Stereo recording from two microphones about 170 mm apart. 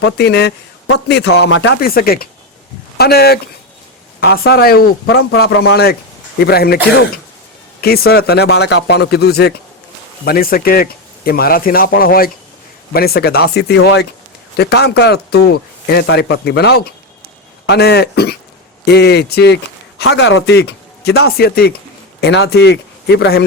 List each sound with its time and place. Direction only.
0.0 s speech: 75° left (ahead or behind)
7.8 s speech: 65° left (ahead or behind)
10.2 s speech: 60° left (ahead or behind); by 14.1 s 85° left
14.5 s speech: 70° left (ahead or behind)
20.0 s speech: 85° left; by 21.7 s 65° left (ahead or behind)
22.2 s speech: 80° left